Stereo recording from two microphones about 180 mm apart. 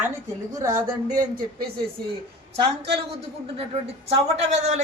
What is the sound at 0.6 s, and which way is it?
Speech, 15° right (ahead or behind).